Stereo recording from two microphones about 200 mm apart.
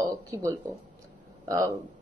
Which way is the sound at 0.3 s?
15° right (ahead or behind).